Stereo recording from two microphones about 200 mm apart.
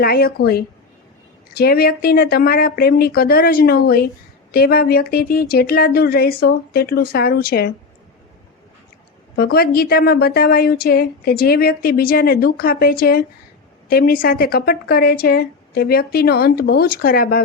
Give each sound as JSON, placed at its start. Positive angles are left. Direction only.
{"t": 0.0, "sound": "a woman's voice", "side_deg": 50}
{"t": 9.3, "sound": "a woman's voice", "side_deg": 50}